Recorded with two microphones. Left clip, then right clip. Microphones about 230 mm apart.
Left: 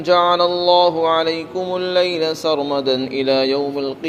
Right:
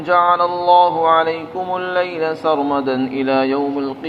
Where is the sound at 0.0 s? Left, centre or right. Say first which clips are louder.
Even; left.